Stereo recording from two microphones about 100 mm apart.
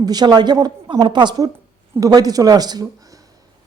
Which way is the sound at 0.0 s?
45° right (ahead or behind).